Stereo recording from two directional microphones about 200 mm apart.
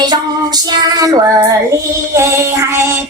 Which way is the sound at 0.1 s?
20° right (ahead or behind).